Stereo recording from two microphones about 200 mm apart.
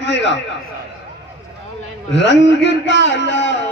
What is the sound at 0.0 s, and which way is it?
Speech, 60° left (ahead or behind).